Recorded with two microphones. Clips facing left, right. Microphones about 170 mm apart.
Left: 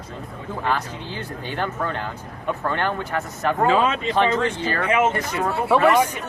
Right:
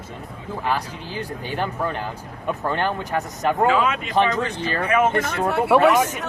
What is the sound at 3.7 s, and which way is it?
Speech, 30° left (ahead or behind).